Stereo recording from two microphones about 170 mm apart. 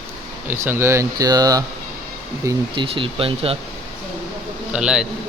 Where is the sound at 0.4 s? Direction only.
15° right (ahead or behind).